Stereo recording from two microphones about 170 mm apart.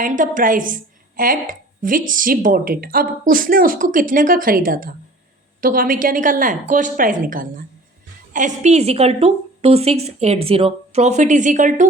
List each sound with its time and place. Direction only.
0.0 s a woman's voice: 50° right (ahead or behind)